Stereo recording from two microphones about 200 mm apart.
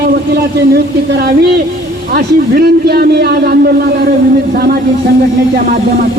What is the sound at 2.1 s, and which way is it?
A man's voice, 50° right (ahead or behind).